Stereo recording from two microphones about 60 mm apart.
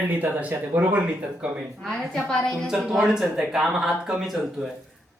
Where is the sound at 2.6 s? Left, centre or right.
Centre.